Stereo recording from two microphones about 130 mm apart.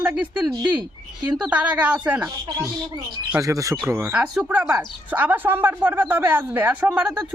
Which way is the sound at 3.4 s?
25° right (ahead or behind).